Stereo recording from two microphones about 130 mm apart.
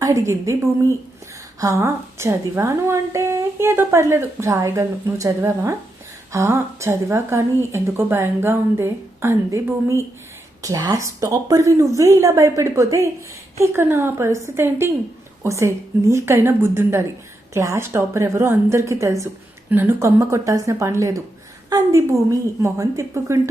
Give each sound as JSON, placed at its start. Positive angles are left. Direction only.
{"t": 0.0, "sound": "a woman's voice", "side_deg": -25}